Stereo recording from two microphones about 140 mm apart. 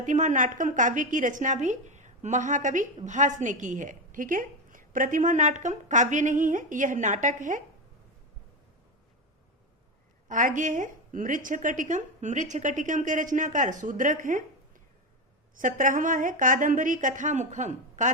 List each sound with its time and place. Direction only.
0.0 s a woman's voice: 60° right (ahead or behind)
10.2 s a woman's voice: 70° right (ahead or behind)
15.5 s a woman's voice: 70° right (ahead or behind)